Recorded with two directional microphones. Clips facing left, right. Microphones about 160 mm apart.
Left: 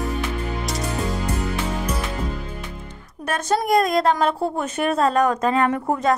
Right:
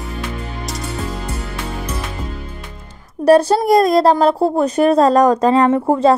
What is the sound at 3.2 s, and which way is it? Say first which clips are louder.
A woman's voice: right 11 dB; 35° right (ahead or behind).